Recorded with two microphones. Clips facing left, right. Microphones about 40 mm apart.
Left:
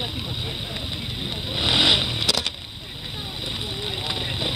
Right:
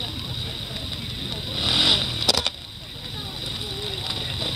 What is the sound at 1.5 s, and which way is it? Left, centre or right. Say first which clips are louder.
Motorcycle: left 2 dB; centre.